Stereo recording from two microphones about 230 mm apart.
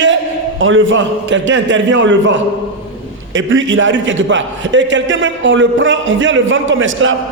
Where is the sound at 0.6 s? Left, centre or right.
Right.